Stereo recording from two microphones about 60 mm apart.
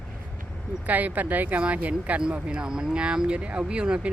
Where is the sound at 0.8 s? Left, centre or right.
Right.